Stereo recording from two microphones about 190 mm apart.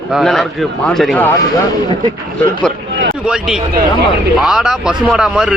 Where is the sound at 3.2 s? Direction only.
5° right (ahead or behind).